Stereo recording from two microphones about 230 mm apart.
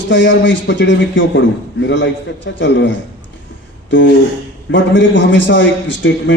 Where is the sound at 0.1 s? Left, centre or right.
Left.